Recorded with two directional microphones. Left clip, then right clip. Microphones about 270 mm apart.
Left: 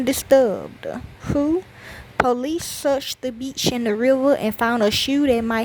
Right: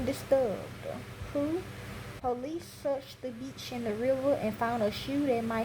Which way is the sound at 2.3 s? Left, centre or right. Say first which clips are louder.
Left 12 dB; left.